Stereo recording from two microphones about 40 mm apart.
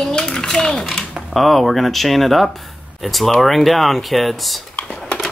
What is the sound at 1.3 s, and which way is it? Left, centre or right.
Speech, centre.